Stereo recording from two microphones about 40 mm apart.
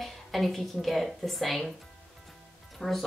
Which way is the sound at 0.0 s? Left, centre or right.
Centre.